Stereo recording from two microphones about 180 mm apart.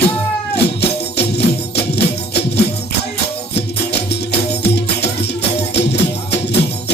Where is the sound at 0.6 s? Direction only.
65° left (ahead or behind).